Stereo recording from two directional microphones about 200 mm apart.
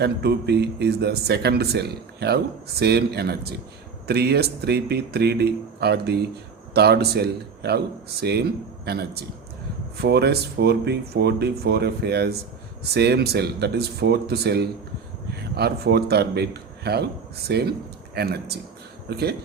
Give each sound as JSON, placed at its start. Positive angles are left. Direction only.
{"t": 0.0, "sound": "a man's voice", "side_deg": -55}